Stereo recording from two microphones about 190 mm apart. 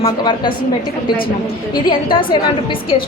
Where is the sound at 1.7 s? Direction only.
25° left (ahead or behind).